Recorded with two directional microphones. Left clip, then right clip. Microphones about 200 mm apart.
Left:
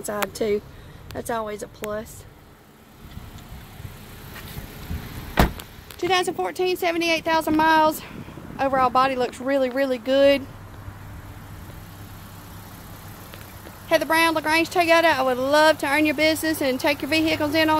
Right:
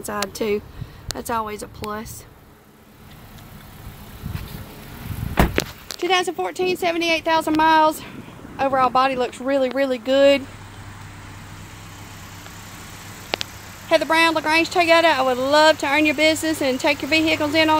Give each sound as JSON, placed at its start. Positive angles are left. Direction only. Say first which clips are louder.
{"t": 0.0, "sound": "speech", "louder": "even", "side_deg": 0}
{"t": 5.9, "sound": "speech", "louder": "right 2 dB", "side_deg": -5}
{"t": 13.8, "sound": "speech", "louder": "right 3 dB", "side_deg": -15}